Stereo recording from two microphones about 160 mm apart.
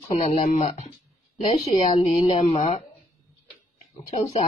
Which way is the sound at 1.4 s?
35° left (ahead or behind).